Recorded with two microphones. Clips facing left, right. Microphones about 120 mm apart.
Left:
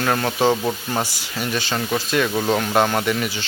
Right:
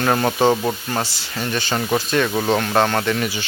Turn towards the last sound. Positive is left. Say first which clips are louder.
# right 1 dB
turn(degrees=5)  # may be behind; listen again after turning